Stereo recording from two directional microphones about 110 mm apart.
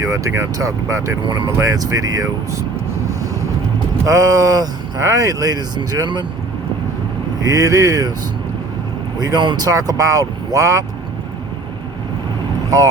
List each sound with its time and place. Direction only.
0.0 s speech: 30° right (ahead or behind)
1.2 s speech: 45° right (ahead or behind)
1.5 s speech: 30° right (ahead or behind)
4.0 s speech: 35° right (ahead or behind)
7.4 s speech: 30° right (ahead or behind)
9.1 s speech: 40° right (ahead or behind)